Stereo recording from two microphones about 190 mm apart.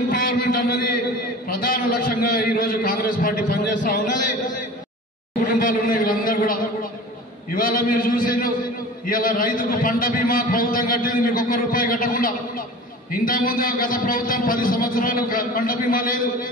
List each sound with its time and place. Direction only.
0.1 s a man's voice: 50° left (ahead or behind)